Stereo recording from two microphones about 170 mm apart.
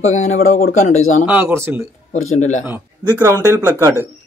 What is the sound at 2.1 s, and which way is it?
Speech, 45° left (ahead or behind).